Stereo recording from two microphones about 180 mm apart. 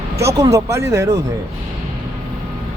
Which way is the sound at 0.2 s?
20° right (ahead or behind).